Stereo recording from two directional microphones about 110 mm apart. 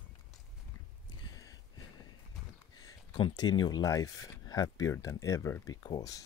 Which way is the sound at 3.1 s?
45° left (ahead or behind).